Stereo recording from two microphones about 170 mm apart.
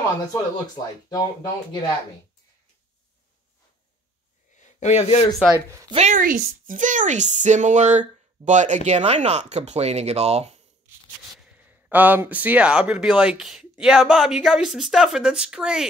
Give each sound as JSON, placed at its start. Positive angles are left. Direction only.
{"t": 0.3, "sound": "speech", "side_deg": 20}
{"t": 4.6, "sound": "speech", "side_deg": 45}
{"t": 5.7, "sound": "a woman's voice", "side_deg": -20}
{"t": 5.9, "sound": "speech", "side_deg": -45}
{"t": 11.3, "sound": "speech", "side_deg": -10}